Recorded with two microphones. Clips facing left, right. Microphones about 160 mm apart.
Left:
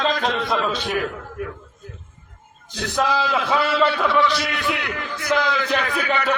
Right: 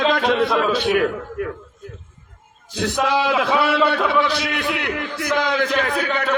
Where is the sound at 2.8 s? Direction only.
70° right (ahead or behind).